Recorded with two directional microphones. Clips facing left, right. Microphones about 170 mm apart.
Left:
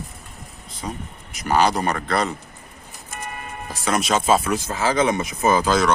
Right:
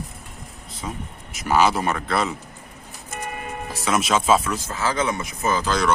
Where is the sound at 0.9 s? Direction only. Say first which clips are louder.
Left 1 dB; centre (ahead or behind).